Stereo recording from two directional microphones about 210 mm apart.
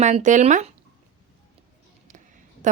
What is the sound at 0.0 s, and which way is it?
Speech, 35° right (ahead or behind).